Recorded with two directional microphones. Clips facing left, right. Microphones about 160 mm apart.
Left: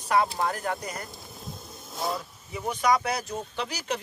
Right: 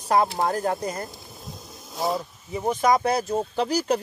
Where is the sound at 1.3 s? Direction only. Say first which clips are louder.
Even; centre (ahead or behind).